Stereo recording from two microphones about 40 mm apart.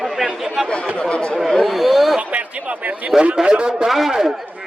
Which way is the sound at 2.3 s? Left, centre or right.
Right.